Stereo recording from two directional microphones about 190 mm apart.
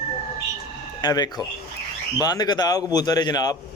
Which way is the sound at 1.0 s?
20° left (ahead or behind).